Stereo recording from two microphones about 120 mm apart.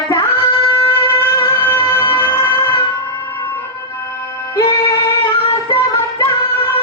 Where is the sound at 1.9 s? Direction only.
25° left (ahead or behind).